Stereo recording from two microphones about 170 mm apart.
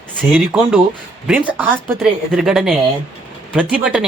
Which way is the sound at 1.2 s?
10° right (ahead or behind).